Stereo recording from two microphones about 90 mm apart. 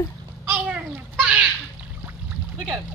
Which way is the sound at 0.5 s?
20° right (ahead or behind).